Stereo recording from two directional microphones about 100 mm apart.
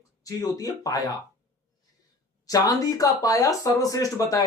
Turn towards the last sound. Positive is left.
turn(degrees=35)  # may be behind; listen again after turning